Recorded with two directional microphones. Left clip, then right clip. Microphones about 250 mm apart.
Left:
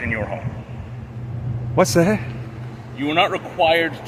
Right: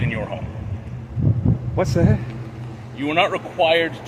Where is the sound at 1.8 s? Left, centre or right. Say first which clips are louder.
Left 5 dB; left.